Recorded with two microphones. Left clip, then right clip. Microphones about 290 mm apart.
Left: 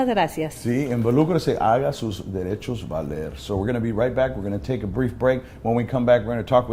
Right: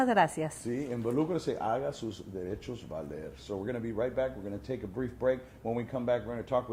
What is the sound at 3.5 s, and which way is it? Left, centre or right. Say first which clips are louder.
Speech: left 10 dB; left.